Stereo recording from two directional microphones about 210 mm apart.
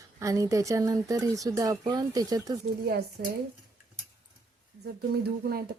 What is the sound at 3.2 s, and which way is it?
Speech, 50° right (ahead or behind).